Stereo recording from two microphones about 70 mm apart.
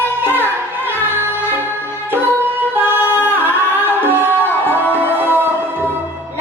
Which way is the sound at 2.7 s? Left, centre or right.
Right.